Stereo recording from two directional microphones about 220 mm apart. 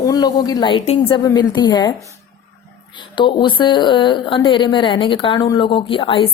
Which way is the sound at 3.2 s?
20° left (ahead or behind).